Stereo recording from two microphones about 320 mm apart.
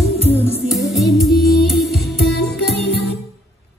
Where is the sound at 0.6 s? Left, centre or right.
Centre.